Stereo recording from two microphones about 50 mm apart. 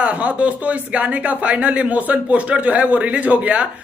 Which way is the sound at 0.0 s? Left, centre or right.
Right.